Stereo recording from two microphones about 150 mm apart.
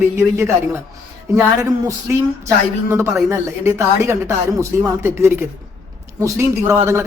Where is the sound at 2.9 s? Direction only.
20° right (ahead or behind).